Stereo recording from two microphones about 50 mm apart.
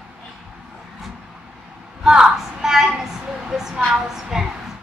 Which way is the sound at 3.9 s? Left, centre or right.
Centre.